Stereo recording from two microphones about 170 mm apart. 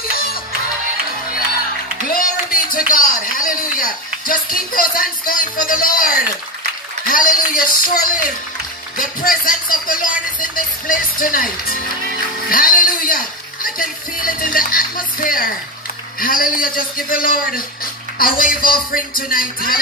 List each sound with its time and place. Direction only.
0.1 s music: 60° left (ahead or behind)
2.0 s speech: 55° left (ahead or behind)